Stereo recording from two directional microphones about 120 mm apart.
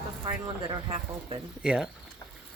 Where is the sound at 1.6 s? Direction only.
5° right (ahead or behind).